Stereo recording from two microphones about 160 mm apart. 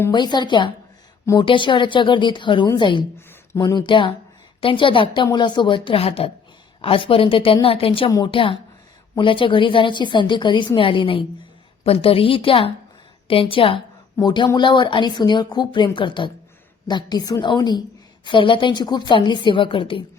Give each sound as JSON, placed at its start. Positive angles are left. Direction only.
{"t": 0.1, "sound": "a woman's voice", "side_deg": 25}